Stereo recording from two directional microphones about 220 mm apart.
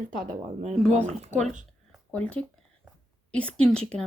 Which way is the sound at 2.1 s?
5° left (ahead or behind).